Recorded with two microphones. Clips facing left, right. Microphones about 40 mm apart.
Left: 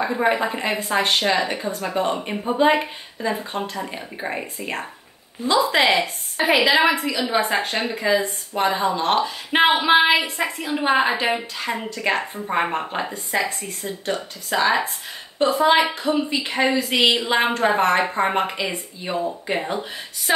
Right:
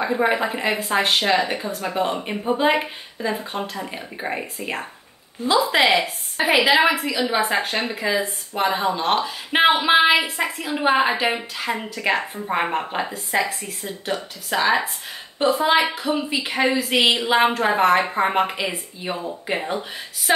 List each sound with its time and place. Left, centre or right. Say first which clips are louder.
0.0 s speech: even; centre